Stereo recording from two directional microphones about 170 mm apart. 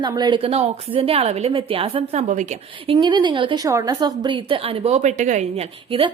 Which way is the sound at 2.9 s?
25° right (ahead or behind).